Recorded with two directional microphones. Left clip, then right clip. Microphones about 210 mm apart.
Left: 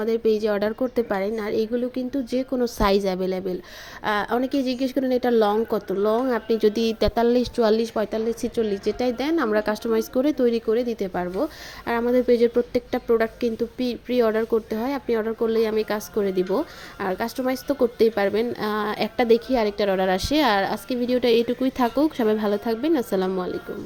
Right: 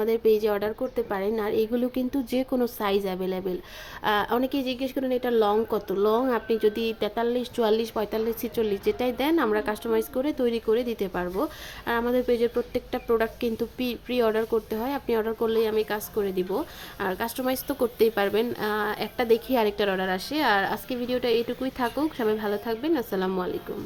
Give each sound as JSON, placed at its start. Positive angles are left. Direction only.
{"t": 0.0, "sound": "speech", "side_deg": 10}
{"t": 2.6, "sound": "a woman's voice", "side_deg": 20}
{"t": 19.5, "sound": "speech", "side_deg": 10}
{"t": 20.0, "sound": "a woman's voice", "side_deg": 25}